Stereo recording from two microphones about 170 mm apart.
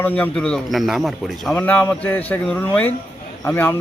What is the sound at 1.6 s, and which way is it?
A man's voice, 10° left (ahead or behind).